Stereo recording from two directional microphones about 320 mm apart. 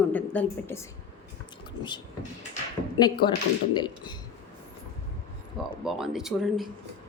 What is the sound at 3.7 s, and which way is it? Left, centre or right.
Speech, centre.